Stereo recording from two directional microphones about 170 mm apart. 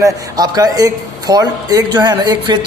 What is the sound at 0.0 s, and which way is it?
Speech, 20° right (ahead or behind).